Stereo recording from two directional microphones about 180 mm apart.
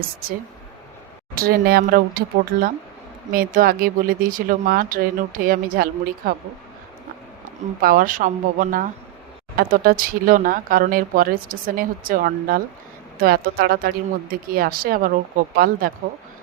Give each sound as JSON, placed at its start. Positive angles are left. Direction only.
{"t": 1.4, "sound": "speech", "side_deg": -55}
{"t": 7.8, "sound": "speech", "side_deg": -50}